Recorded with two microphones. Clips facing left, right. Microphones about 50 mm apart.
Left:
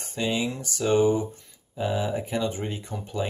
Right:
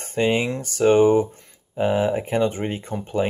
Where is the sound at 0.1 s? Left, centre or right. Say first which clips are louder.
Right 6 dB; right.